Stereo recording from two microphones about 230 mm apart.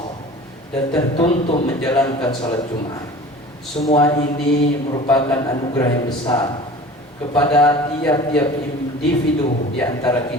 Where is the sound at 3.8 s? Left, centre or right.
Left.